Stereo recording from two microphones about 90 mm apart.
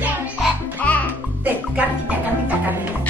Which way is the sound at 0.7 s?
20° left (ahead or behind).